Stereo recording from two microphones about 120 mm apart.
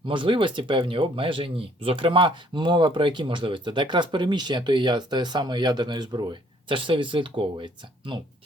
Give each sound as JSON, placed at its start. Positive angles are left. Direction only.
{"t": 0.0, "sound": "speech", "side_deg": -45}